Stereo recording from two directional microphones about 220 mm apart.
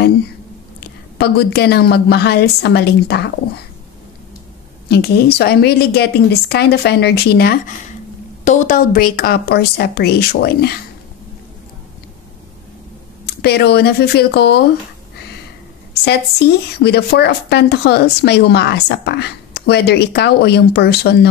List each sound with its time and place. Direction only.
0.7 s speech: 50° left (ahead or behind)
4.8 s speech: 45° left (ahead or behind)
8.5 s speech: 35° left (ahead or behind)
13.2 s speech: 45° left (ahead or behind)
15.9 s speech: 45° left (ahead or behind)